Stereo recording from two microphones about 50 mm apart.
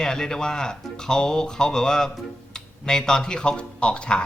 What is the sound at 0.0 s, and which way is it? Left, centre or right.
Speech, centre.